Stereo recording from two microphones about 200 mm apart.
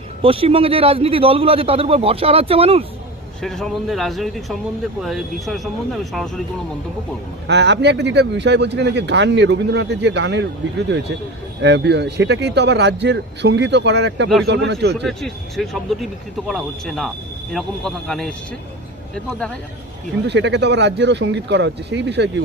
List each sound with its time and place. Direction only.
0.2 s a man's voice: 30° right (ahead or behind)
3.4 s speech: centre (ahead or behind)
7.4 s speech: 60° right (ahead or behind)
11.6 s speech: 60° right (ahead or behind)
15.0 s speech: centre (ahead or behind)
20.2 s speech: 60° right (ahead or behind)